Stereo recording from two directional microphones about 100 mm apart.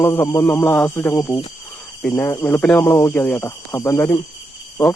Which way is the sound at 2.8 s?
25° left (ahead or behind).